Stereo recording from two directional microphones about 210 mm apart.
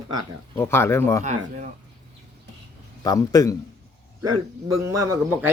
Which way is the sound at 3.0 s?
15° left (ahead or behind).